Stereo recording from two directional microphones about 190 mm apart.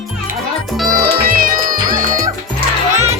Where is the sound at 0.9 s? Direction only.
50° right (ahead or behind).